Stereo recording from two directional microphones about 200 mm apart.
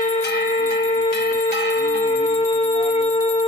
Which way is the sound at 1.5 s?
55° left (ahead or behind).